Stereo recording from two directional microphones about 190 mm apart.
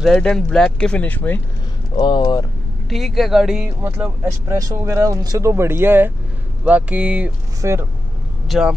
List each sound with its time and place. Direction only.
0.0 s speech: 5° left (ahead or behind)
2.0 s speech: 25° left (ahead or behind)
2.9 s speech: centre (ahead or behind)